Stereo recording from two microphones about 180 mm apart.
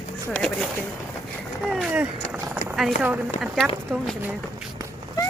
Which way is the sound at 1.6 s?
Centre (ahead or behind).